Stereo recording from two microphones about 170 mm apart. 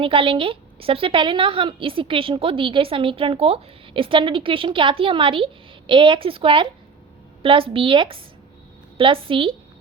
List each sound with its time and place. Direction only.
0.0 s a woman's voice: 30° right (ahead or behind)